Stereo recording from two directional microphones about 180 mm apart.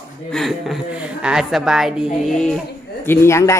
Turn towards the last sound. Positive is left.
turn(degrees=15)  # may be behind; listen again after turning